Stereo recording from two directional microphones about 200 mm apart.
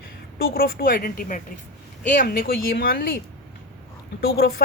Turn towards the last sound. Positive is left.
turn(degrees=50)  # may be behind; listen again after turning